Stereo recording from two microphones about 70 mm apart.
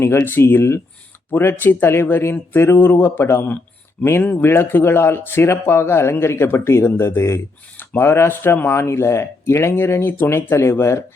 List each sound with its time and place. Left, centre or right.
0.0 s speech: left